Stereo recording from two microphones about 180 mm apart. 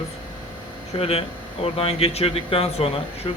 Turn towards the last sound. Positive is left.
turn(degrees=35)  # may be behind; listen again after turning